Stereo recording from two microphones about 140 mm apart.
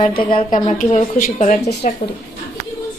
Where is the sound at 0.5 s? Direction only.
60° left (ahead or behind).